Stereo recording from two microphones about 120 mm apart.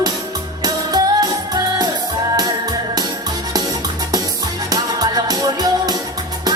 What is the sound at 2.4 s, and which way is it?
Music, 35° right (ahead or behind).